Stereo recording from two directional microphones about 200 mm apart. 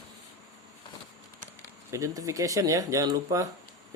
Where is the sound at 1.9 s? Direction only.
15° right (ahead or behind).